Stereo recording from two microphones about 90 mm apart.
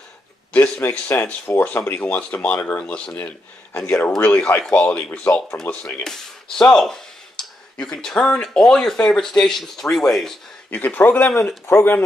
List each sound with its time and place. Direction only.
0.5 s speech: 20° left (ahead or behind)
6.6 s speech: 5° left (ahead or behind)
10.7 s speech: 20° left (ahead or behind)
11.3 s speech: 30° left (ahead or behind)